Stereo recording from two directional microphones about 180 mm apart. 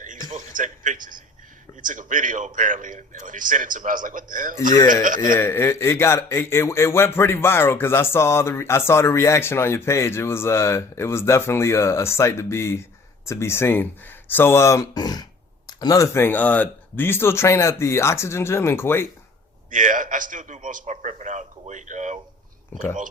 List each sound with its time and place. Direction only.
0.3 s a sound: 45° right (ahead or behind)
1.8 s speech: 45° right (ahead or behind)
5.2 s speech: 15° left (ahead or behind)
19.7 s speech: 45° right (ahead or behind)